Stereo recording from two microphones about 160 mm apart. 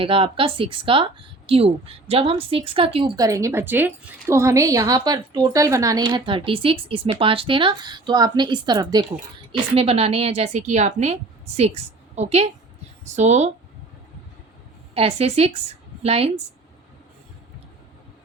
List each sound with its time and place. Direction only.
0.0 s a woman's voice: 35° right (ahead or behind)
3.2 s a woman's voice: 20° right (ahead or behind)
9.5 s a woman's voice: 40° right (ahead or behind)
14.9 s a woman's voice: 40° right (ahead or behind)